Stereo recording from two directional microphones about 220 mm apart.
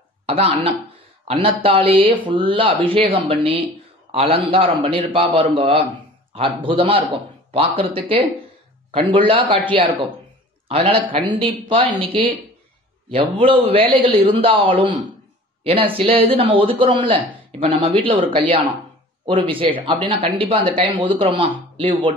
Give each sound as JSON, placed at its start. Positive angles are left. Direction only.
{"t": 0.3, "sound": "speech", "side_deg": -25}
{"t": 19.2, "sound": "speech", "side_deg": -25}